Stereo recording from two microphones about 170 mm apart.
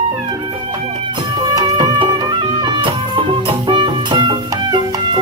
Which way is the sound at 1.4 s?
25° right (ahead or behind).